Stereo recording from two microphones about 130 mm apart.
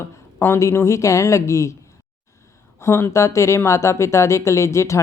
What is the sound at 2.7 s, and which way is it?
Speech, 20° left (ahead or behind).